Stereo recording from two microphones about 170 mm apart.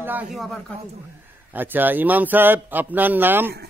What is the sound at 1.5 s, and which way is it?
A man's voice, 10° right (ahead or behind).